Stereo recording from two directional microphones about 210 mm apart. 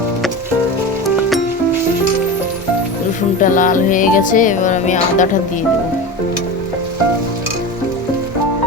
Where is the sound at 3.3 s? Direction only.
40° left (ahead or behind).